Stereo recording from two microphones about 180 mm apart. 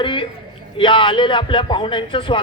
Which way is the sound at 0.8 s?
25° left (ahead or behind).